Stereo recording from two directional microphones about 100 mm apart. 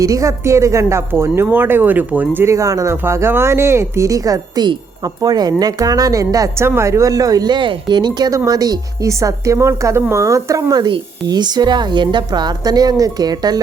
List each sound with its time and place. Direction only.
0.0 s a woman's voice: 35° right (ahead or behind)